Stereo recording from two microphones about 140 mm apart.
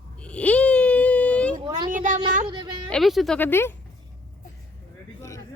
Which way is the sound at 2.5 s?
35° right (ahead or behind).